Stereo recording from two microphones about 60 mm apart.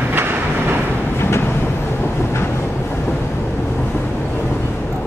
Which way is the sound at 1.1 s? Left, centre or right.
Left.